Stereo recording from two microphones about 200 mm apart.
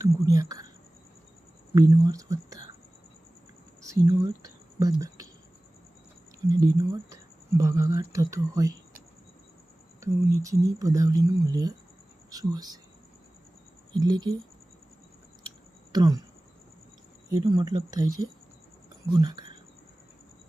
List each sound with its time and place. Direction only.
0.0 s speech: 15° right (ahead or behind)
1.7 s speech: 15° right (ahead or behind)
3.8 s speech: 15° right (ahead or behind)
6.6 s speech: 15° right (ahead or behind)
10.0 s speech: 15° right (ahead or behind)
13.9 s speech: 20° right (ahead or behind)
15.9 s speech: 20° right (ahead or behind)
17.3 s speech: 20° right (ahead or behind)
19.1 s speech: 20° right (ahead or behind)